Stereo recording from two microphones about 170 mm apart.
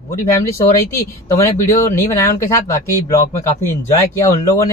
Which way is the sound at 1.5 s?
15° left (ahead or behind).